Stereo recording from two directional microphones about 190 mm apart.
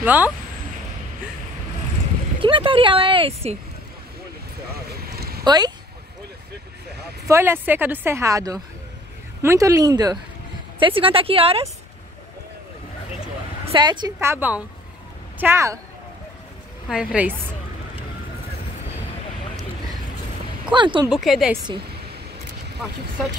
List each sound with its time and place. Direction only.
0.0 s speech: 10° right (ahead or behind)
2.4 s speech: 25° right (ahead or behind)
5.0 s a sound: 55° right (ahead or behind)
5.4 s speech: 20° right (ahead or behind)
7.2 s speech: 15° right (ahead or behind); by 11.6 s 30° right (ahead or behind)
13.7 s speech: 25° right (ahead or behind)
16.9 s speech: 5° right (ahead or behind)
20.7 s speech: 25° right (ahead or behind)
21.1 s a woman's voice: centre (ahead or behind)